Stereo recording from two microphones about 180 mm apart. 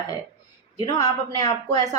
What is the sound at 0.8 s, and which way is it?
Speech, 20° left (ahead or behind).